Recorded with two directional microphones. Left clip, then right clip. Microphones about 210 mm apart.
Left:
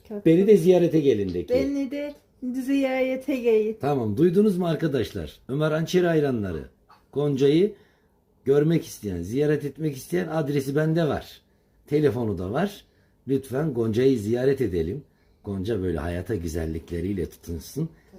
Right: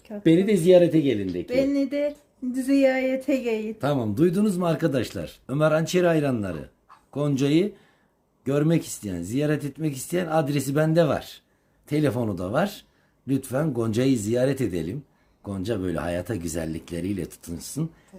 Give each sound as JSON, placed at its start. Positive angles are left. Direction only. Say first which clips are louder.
{"t": 0.3, "sound": "speech", "louder": "left 1 dB", "side_deg": -20}